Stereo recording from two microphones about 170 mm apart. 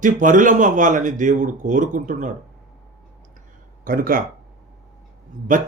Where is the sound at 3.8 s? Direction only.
55° right (ahead or behind).